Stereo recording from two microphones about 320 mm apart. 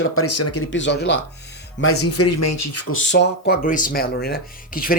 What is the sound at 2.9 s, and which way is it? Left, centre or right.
Speech, left.